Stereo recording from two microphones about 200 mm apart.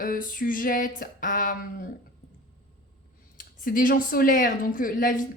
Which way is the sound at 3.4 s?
40° left (ahead or behind).